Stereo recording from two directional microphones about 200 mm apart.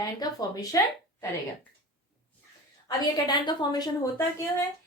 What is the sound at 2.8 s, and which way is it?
A woman's voice, 20° left (ahead or behind).